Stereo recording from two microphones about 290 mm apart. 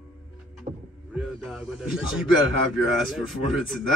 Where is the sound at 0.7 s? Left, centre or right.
Right.